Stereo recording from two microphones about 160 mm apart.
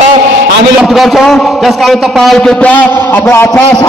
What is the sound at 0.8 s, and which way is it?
A man's voice, centre (ahead or behind).